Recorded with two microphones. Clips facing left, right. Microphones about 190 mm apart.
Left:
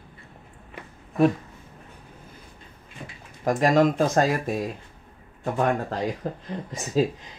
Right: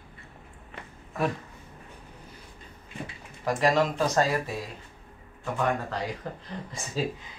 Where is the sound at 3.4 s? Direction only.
50° left (ahead or behind).